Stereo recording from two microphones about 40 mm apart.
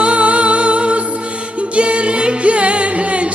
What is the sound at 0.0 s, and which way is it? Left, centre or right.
Music, right.